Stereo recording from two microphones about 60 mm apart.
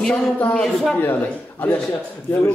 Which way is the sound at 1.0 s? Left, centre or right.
Left.